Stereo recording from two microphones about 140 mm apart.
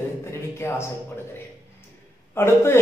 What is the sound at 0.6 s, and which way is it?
Speech, 20° left (ahead or behind).